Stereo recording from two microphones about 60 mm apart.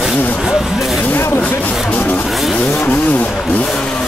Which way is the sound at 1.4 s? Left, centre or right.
Left.